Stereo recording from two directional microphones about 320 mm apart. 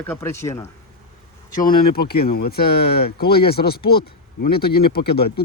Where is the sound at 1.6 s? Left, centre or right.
Left.